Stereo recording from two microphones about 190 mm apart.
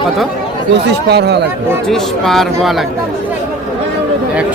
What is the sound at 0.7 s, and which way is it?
Speech, 60° right (ahead or behind).